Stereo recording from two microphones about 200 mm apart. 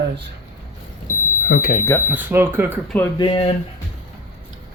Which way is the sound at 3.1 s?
25° left (ahead or behind).